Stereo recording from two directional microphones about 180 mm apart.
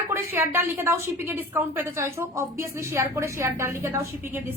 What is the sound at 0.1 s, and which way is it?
A woman's voice, 10° right (ahead or behind).